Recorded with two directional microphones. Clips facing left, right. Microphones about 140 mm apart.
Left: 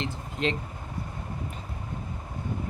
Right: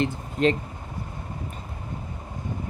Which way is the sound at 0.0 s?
45° right (ahead or behind).